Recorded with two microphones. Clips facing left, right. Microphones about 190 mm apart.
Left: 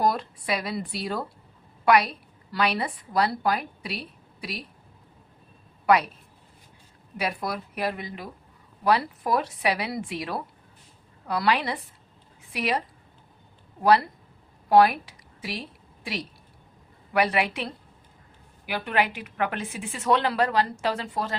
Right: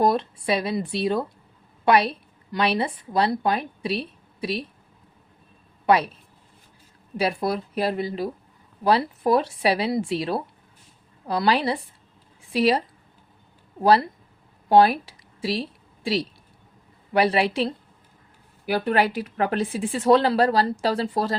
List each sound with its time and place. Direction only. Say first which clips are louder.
0.0 s a woman's voice: right 4 dB; 25° right (ahead or behind)
5.8 s speech: right 2 dB; 30° right (ahead or behind)
7.2 s a woman's voice: right 6 dB; 30° right (ahead or behind)
13.8 s speech: right 2 dB; 30° right (ahead or behind)
15.0 s a sound: right 9 dB; 30° right (ahead or behind)
17.1 s a woman's voice: right 4 dB; 30° right (ahead or behind)